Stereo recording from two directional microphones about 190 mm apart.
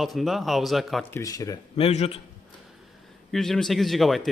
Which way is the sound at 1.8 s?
30° left (ahead or behind).